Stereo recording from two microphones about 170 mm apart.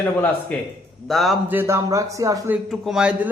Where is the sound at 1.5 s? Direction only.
10° right (ahead or behind).